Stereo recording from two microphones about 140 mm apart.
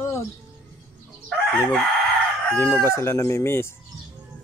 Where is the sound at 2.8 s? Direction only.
20° left (ahead or behind).